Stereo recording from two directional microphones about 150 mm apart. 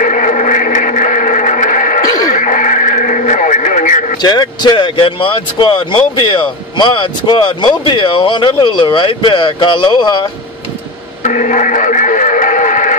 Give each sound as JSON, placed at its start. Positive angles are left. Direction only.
{"t": 0.0, "sound": "a sound", "side_deg": 60}
{"t": 2.3, "sound": "radio", "side_deg": 60}
{"t": 4.2, "sound": "speech", "side_deg": 30}
{"t": 11.2, "sound": "radio", "side_deg": 55}